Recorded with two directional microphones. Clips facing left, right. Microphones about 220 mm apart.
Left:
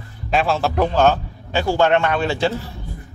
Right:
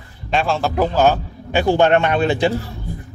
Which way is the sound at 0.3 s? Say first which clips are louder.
Even; centre (ahead or behind).